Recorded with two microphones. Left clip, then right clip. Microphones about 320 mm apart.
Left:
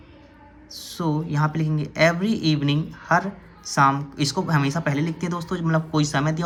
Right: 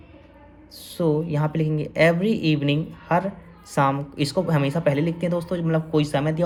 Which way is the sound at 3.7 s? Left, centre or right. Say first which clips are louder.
Left 3 dB; centre.